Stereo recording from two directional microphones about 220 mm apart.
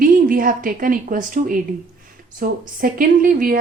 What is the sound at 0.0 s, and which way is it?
A woman's voice, 40° right (ahead or behind).